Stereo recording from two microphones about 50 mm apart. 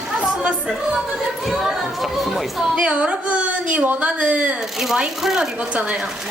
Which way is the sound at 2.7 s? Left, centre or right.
Right.